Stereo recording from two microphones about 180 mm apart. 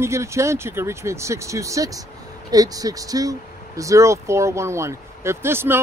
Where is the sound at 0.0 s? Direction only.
15° right (ahead or behind).